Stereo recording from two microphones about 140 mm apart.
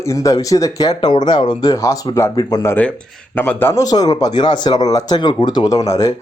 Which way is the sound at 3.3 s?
10° left (ahead or behind).